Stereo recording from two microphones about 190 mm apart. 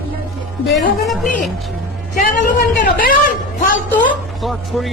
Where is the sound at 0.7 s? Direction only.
Centre (ahead or behind).